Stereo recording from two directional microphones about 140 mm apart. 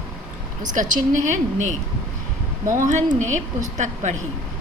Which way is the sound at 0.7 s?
65° right (ahead or behind).